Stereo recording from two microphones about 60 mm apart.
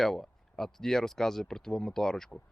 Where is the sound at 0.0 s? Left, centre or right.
Centre.